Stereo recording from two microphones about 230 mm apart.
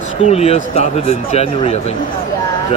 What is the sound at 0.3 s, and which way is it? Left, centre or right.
A man's voice, left.